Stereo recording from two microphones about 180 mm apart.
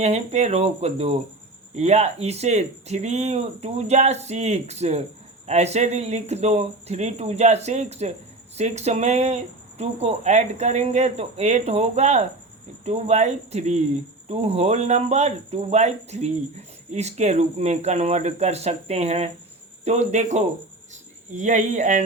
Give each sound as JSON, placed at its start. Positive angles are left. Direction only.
{"t": 0.0, "sound": "speech", "side_deg": -35}